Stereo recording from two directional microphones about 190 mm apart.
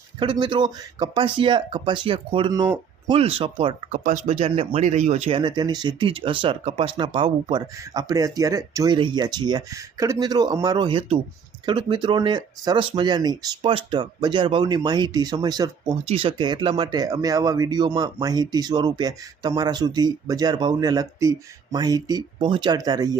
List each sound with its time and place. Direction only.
0.2 s speech: 25° right (ahead or behind)
4.0 s speech: 45° right (ahead or behind); by 23.1 s 20° right (ahead or behind)